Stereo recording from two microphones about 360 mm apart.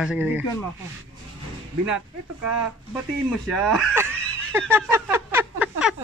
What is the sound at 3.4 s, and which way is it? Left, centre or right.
Snicker, centre.